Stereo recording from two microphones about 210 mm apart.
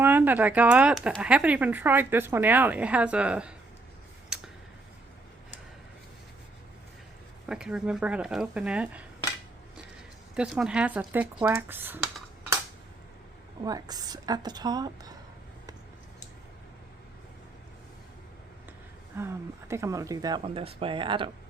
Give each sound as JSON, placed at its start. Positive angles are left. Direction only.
{"t": 0.0, "sound": "speech", "side_deg": -10}
{"t": 4.3, "sound": "a sound", "side_deg": -5}
{"t": 7.4, "sound": "speech", "side_deg": -5}
{"t": 10.3, "sound": "speech", "side_deg": -5}
{"t": 13.7, "sound": "speech", "side_deg": -20}
{"t": 19.1, "sound": "speech", "side_deg": -10}